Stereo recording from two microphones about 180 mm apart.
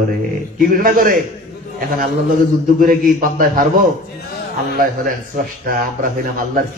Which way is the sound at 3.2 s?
50° right (ahead or behind).